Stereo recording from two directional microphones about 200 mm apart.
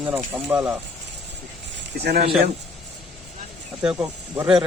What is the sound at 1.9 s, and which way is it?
Speech, 55° right (ahead or behind).